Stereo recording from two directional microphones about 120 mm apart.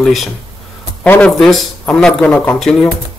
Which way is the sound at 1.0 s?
15° left (ahead or behind).